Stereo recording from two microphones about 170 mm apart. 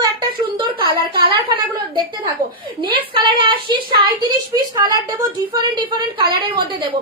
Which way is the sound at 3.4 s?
30° right (ahead or behind).